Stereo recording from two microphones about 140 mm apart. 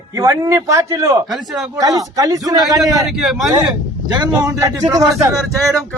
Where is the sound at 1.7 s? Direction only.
25° right (ahead or behind).